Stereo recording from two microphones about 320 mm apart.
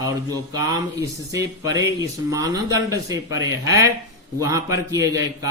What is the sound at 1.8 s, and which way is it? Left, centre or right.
Speech, centre.